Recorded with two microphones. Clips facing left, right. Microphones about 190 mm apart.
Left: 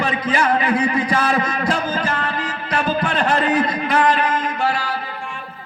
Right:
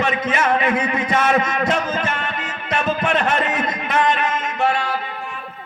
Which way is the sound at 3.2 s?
30° left (ahead or behind).